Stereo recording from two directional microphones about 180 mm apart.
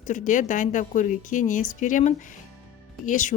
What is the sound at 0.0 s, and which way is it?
A woman's voice, 45° left (ahead or behind).